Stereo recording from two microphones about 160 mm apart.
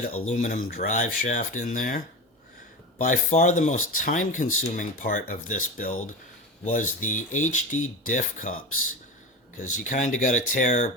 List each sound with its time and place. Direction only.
0.3 s speech: 50° left (ahead or behind)
3.0 s speech: 55° left (ahead or behind)
9.6 s speech: 50° left (ahead or behind)